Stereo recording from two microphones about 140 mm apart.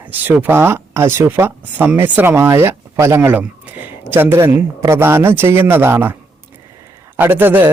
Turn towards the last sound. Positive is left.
turn(degrees=-15)  # may be behind; listen again after turning